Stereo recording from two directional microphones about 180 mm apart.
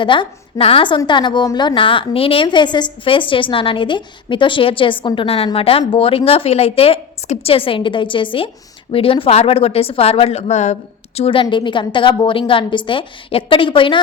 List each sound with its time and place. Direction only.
0.0 s a woman's voice: 25° left (ahead or behind)